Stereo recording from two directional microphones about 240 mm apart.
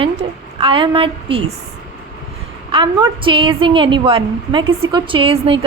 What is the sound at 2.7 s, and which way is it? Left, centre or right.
A woman's voice, centre.